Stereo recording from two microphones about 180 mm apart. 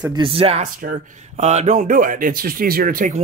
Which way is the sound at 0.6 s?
45° right (ahead or behind).